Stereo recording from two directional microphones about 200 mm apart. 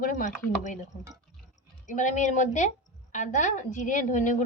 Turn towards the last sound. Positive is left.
turn(degrees=40)  # may be behind; listen again after turning